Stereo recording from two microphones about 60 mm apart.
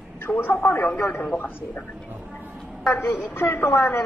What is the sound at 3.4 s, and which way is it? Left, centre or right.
Speech, left.